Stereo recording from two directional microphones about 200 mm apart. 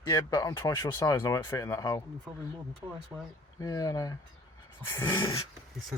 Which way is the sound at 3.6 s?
15° left (ahead or behind).